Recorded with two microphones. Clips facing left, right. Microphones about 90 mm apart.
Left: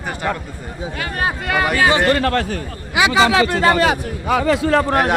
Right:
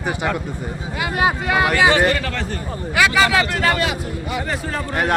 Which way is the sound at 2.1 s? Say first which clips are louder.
Left 6 dB; 50° left (ahead or behind).